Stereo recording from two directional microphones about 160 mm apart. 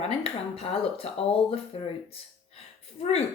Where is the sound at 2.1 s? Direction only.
40° left (ahead or behind).